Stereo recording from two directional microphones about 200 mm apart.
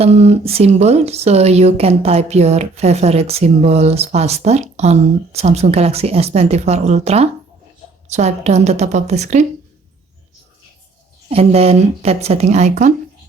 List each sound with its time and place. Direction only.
0.0 s speech: 30° right (ahead or behind)
11.3 s speech: 30° right (ahead or behind)